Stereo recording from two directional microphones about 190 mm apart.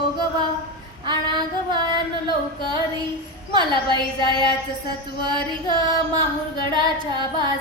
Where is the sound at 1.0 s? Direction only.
25° right (ahead or behind).